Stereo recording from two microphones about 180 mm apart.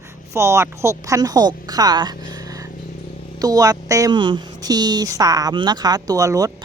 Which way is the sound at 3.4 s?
20° right (ahead or behind).